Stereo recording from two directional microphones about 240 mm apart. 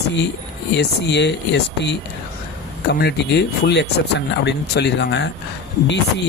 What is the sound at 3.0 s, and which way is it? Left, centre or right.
Speech, left.